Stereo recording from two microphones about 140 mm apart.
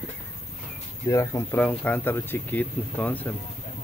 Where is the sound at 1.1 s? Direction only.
20° left (ahead or behind).